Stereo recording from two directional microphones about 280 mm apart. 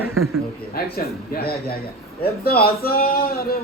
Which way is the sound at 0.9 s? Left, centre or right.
Left.